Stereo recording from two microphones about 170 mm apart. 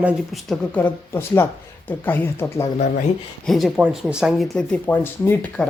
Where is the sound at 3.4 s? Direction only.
Centre (ahead or behind).